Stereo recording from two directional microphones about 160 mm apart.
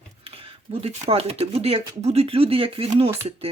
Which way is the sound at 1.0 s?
40° right (ahead or behind).